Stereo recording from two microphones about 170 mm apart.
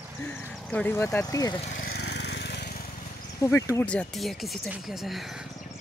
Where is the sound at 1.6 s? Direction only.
50° left (ahead or behind); by 2.8 s 75° left (ahead or behind).